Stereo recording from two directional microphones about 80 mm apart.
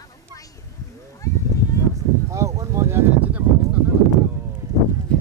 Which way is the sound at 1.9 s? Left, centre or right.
Right.